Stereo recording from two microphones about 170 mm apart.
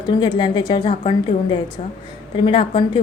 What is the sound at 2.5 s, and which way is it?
Speech, 30° left (ahead or behind).